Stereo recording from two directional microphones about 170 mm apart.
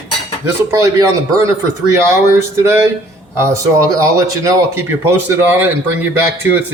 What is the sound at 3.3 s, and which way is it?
Speech, 15° right (ahead or behind).